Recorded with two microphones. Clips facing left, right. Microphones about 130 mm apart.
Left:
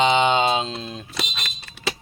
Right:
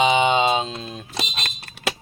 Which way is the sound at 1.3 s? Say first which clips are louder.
Right 2 dB; 55° right (ahead or behind).